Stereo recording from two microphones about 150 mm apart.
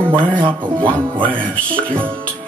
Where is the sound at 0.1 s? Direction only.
35° right (ahead or behind).